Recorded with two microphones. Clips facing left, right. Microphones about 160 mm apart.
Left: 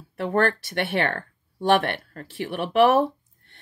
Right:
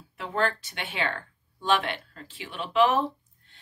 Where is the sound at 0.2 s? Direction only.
60° left (ahead or behind).